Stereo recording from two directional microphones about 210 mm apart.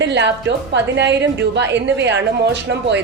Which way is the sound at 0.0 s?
55° right (ahead or behind).